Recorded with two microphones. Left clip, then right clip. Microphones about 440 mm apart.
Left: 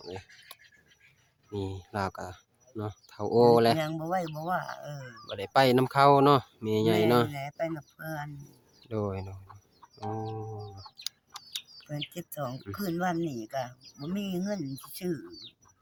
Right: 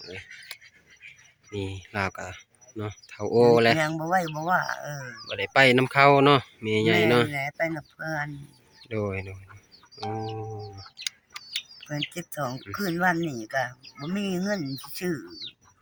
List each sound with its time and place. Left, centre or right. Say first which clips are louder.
1.5 s speech: right 2 dB; left
10.0 s music: right 4 dB; left
11.9 s speech: right 5 dB; left